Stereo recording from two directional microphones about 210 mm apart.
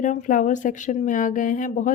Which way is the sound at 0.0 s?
35° left (ahead or behind).